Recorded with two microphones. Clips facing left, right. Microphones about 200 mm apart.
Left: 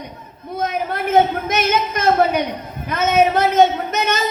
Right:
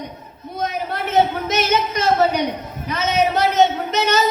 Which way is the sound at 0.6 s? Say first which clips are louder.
Left 2 dB; 50° left (ahead or behind).